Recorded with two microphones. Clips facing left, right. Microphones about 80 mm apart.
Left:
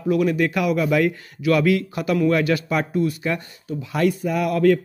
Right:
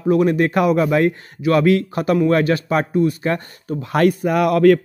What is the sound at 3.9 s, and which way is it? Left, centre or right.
Speech, right.